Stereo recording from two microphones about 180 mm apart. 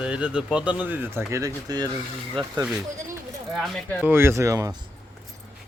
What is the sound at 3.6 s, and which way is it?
Speech, centre (ahead or behind).